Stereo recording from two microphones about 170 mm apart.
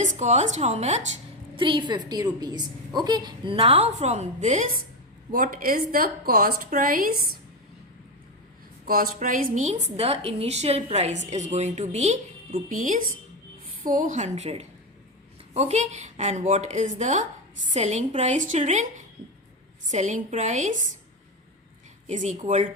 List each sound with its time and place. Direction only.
0.0 s a woman's voice: 45° right (ahead or behind)
1.5 s a woman's voice: 30° right (ahead or behind); by 7.2 s 55° right (ahead or behind)
8.9 s a woman's voice: 55° right (ahead or behind)
22.1 s a woman's voice: 45° right (ahead or behind)